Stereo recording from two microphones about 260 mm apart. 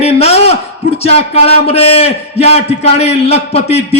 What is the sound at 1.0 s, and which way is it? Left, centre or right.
A man's voice, left.